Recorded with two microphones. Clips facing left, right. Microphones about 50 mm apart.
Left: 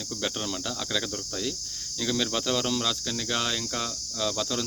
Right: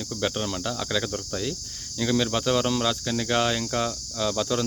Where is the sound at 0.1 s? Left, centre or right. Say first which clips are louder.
Right 4 dB; centre.